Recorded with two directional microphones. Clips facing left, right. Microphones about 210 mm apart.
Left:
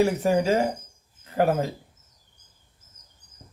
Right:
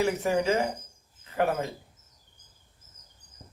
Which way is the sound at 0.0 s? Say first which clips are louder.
Left 4 dB; 35° left (ahead or behind).